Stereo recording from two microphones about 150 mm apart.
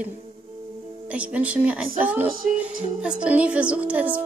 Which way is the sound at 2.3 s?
70° right (ahead or behind).